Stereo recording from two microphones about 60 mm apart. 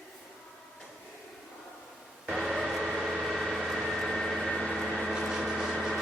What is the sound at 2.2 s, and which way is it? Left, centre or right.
Music, centre.